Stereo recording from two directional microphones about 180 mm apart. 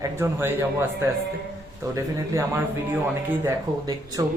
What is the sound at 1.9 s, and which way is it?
Speech, 15° right (ahead or behind).